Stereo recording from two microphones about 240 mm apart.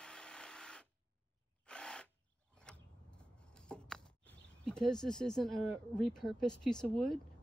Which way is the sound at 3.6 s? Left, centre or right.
Centre.